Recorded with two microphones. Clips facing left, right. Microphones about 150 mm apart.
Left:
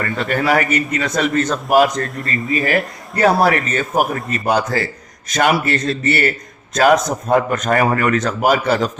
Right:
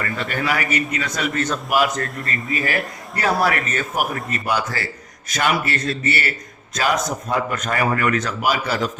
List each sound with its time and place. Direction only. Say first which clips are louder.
0.0 s a man's voice: left 5 dB; 45° left (ahead or behind)
2.0 s a man's voice: left 4 dB; 25° left (ahead or behind)
3.9 s a man's voice: left 7 dB; 40° left (ahead or behind)